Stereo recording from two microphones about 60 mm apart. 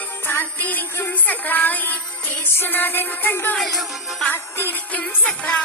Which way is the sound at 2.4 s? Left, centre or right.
Left.